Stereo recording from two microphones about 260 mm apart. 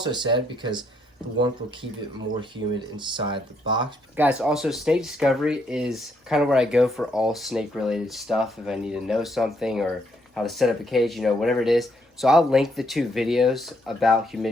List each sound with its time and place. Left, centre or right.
0.0 s speech: centre
2.4 s speech: centre
4.2 s speech: centre